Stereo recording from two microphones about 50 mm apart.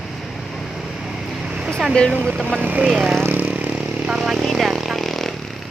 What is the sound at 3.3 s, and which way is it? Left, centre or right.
Vehicle, right.